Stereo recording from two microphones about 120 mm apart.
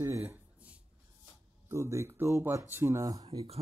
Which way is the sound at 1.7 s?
25° right (ahead or behind).